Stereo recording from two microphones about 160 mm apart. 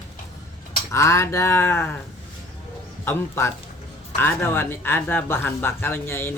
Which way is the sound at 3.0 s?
15° left (ahead or behind).